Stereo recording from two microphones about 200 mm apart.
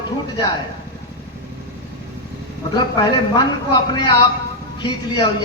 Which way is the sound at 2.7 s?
20° left (ahead or behind).